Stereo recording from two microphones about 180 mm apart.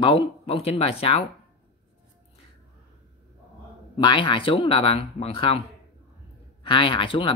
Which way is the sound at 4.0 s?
25° left (ahead or behind).